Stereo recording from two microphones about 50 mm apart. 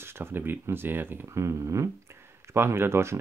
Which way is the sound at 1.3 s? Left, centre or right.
Right.